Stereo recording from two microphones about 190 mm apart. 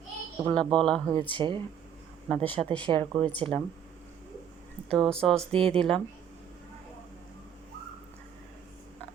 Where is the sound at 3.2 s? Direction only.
5° left (ahead or behind).